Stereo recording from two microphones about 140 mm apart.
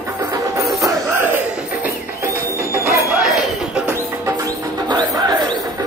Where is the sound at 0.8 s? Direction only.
15° right (ahead or behind).